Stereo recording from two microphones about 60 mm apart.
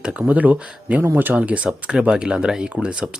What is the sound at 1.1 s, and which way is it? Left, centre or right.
Speech, right.